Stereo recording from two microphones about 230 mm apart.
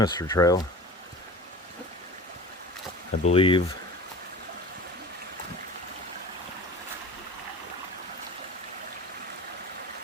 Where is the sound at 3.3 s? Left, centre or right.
Left.